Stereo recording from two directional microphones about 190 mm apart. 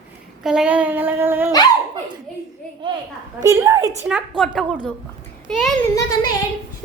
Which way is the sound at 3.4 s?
15° right (ahead or behind).